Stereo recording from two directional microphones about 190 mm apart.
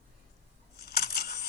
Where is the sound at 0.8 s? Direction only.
55° left (ahead or behind).